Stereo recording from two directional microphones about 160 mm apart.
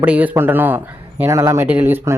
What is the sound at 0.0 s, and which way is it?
Speech, 10° right (ahead or behind).